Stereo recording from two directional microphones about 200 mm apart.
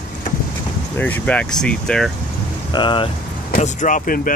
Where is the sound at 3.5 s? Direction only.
40° left (ahead or behind).